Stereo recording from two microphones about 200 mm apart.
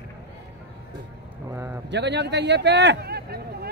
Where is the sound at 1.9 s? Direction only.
60° right (ahead or behind).